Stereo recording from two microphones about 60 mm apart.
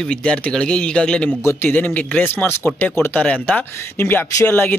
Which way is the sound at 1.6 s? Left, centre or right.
Left.